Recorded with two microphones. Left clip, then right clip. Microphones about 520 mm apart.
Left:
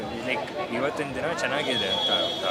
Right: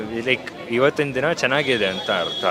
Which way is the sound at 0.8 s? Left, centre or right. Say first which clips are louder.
Right 12 dB; right.